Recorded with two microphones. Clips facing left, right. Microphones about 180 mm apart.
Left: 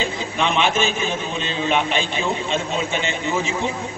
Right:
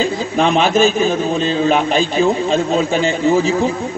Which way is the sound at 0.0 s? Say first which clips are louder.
Right 7 dB; 35° right (ahead or behind).